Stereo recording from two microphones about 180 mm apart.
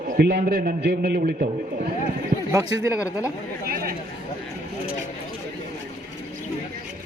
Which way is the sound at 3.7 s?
55° right (ahead or behind).